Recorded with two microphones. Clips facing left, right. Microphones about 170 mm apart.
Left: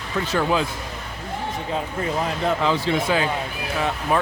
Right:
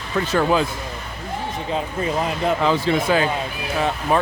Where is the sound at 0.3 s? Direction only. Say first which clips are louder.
Right 3 dB; 50° right (ahead or behind).